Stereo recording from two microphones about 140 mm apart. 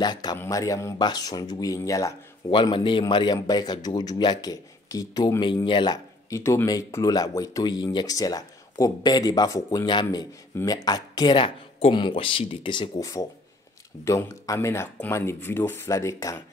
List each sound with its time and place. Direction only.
0.0 s speech: 30° left (ahead or behind)
2.5 s speech: 35° left (ahead or behind)
6.3 s speech: 20° left (ahead or behind)